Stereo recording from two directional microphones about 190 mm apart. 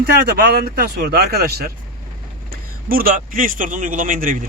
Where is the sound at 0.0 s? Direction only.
60° right (ahead or behind).